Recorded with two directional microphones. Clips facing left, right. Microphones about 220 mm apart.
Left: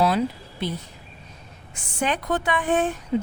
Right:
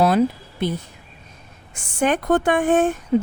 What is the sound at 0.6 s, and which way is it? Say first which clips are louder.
A woman's voice: right 5 dB; 50° right (ahead or behind).